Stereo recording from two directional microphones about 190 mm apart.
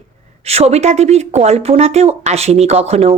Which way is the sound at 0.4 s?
35° right (ahead or behind).